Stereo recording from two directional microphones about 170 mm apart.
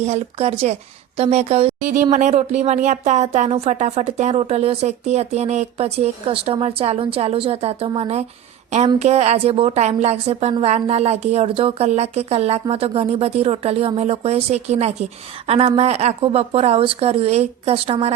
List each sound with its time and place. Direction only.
0.0 s speech: 40° right (ahead or behind)